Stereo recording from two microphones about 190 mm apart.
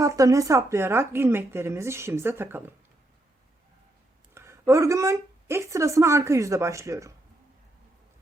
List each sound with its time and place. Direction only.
0.0 s a woman's voice: 20° right (ahead or behind)
4.4 s speech: 15° right (ahead or behind)